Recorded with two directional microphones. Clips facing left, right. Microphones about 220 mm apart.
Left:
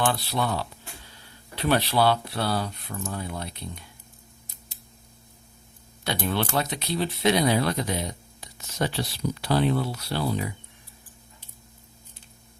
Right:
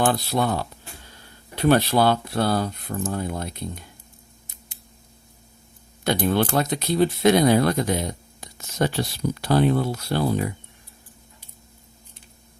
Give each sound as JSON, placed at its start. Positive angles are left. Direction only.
{"t": 0.0, "sound": "speech", "side_deg": -45}
{"t": 6.1, "sound": "speech", "side_deg": -45}